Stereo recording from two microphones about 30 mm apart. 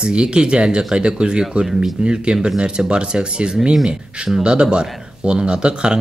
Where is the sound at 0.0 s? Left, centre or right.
Right.